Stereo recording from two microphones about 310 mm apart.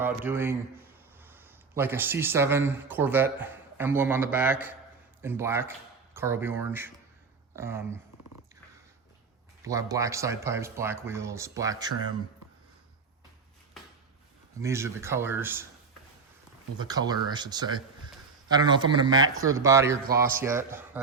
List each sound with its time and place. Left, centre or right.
0.0 s a man's voice: centre
9.6 s speech: centre
14.6 s speech: centre
16.7 s speech: centre
20.1 s speech: right
20.4 s speech: centre